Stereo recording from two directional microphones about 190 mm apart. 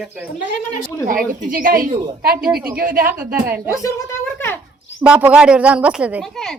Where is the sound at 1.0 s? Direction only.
45° right (ahead or behind).